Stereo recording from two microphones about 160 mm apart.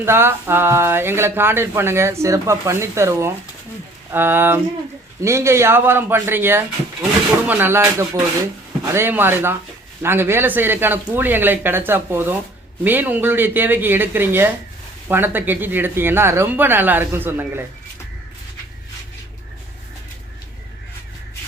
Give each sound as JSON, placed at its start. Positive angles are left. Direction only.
{"t": 0.0, "sound": "speech", "side_deg": -15}